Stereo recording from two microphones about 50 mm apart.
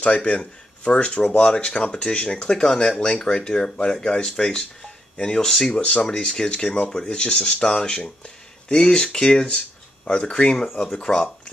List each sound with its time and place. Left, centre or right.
0.0 s speech: left
5.8 s speech: left
6.0 s speech: centre